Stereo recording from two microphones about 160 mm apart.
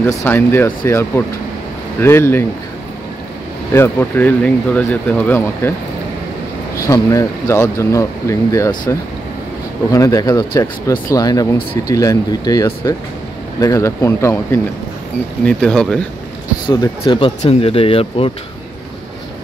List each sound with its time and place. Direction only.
0.2 s speech: 15° left (ahead or behind)
3.7 s speech: 15° left (ahead or behind)
6.8 s speech: 20° left (ahead or behind)
15.4 s speech: 5° left (ahead or behind)
16.6 s speech: 25° left (ahead or behind)